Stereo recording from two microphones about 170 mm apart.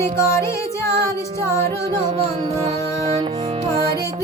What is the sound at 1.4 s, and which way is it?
Music, 15° left (ahead or behind).